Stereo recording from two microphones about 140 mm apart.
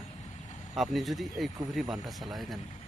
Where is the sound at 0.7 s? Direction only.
Centre (ahead or behind).